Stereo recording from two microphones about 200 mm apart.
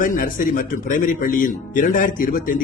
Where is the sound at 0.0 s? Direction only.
45° left (ahead or behind).